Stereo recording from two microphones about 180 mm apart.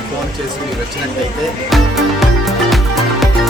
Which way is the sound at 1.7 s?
Centre (ahead or behind).